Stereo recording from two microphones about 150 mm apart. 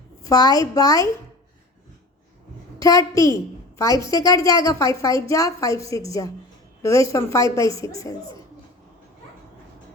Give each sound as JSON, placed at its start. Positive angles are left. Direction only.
{"t": 0.2, "sound": "a woman's voice", "side_deg": 25}
{"t": 2.7, "sound": "a woman's voice", "side_deg": 20}